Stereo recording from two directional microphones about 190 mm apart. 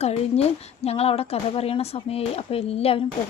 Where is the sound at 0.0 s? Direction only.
35° left (ahead or behind).